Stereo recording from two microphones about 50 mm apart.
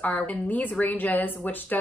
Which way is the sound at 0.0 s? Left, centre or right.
Left.